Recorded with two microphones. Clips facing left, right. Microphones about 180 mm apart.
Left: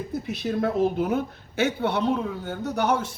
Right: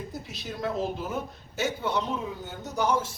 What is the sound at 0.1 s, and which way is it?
A woman's voice, 55° left (ahead or behind).